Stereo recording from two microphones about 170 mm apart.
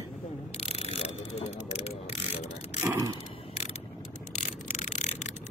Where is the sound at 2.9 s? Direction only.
20° right (ahead or behind).